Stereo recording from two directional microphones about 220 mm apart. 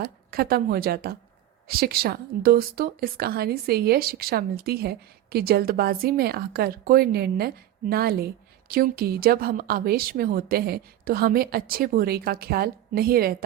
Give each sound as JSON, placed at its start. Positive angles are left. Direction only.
{"t": 0.0, "sound": "speech", "side_deg": -45}